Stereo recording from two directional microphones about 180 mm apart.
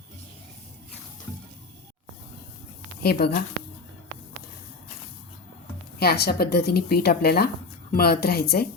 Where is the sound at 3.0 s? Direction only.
60° left (ahead or behind).